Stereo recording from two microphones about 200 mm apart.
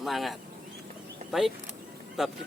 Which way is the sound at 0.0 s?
Centre (ahead or behind).